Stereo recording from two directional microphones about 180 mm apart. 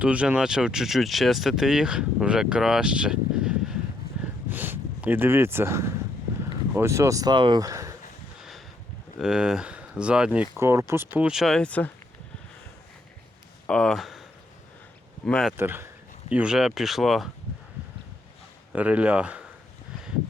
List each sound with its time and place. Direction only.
0.0 s speech: 5° right (ahead or behind)
8.4 s a sound: centre (ahead or behind)
9.1 s speech: 5° right (ahead or behind)
13.7 s speech: 5° left (ahead or behind)
15.3 s speech: 5° left (ahead or behind)
15.5 s speech: 10° right (ahead or behind)
18.7 s speech: 10° right (ahead or behind)